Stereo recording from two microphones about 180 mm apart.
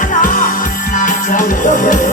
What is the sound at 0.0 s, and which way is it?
Music, 45° left (ahead or behind).